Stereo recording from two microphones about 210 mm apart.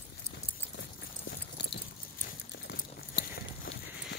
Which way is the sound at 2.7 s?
50° left (ahead or behind).